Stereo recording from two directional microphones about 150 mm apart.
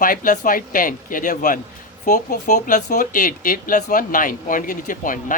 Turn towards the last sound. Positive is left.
turn(degrees=65)  # may be behind; listen again after turning